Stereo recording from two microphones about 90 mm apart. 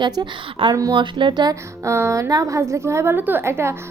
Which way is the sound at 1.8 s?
30° right (ahead or behind).